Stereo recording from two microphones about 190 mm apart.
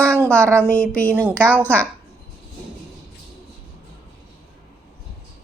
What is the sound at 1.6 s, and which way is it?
Speech, 10° left (ahead or behind).